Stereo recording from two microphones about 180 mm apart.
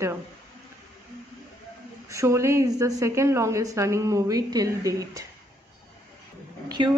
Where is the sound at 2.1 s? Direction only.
15° right (ahead or behind).